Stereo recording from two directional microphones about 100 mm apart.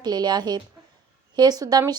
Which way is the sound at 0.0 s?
45° right (ahead or behind).